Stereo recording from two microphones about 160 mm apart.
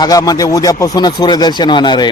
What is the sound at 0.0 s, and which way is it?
A man's voice, 25° left (ahead or behind).